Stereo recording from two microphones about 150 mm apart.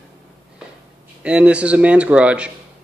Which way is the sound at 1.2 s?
10° right (ahead or behind).